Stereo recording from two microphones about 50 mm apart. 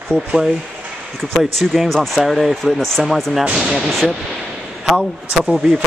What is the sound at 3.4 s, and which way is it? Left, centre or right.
Speech, centre.